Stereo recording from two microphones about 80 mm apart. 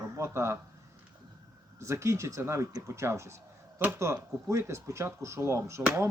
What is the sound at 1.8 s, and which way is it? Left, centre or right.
Speech, right.